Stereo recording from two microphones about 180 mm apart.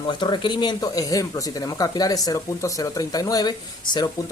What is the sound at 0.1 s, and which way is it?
Speech, 25° left (ahead or behind).